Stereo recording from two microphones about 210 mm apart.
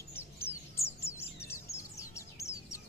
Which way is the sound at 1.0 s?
10° left (ahead or behind).